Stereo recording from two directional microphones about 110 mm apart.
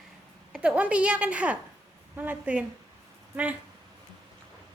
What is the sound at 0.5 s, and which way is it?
A woman's voice, 10° right (ahead or behind).